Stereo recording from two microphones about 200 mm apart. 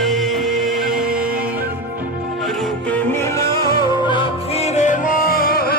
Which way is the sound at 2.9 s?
10° left (ahead or behind).